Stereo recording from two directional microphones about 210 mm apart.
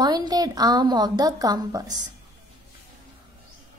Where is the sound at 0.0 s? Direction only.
20° right (ahead or behind).